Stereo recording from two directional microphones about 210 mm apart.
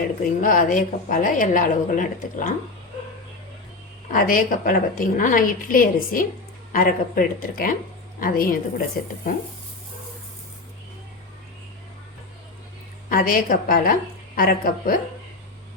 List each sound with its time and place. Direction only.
0.2 s a woman's voice: 40° left (ahead or behind)
4.1 s a woman's voice: 40° left (ahead or behind)
13.1 s speech: 45° left (ahead or behind)